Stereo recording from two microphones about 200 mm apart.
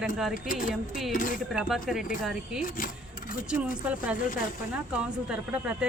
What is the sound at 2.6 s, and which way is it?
Speech, 45° left (ahead or behind).